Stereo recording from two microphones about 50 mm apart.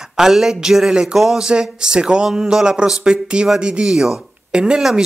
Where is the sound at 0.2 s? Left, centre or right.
Centre.